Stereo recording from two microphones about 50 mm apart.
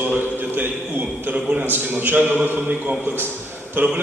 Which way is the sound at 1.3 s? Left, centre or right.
Right.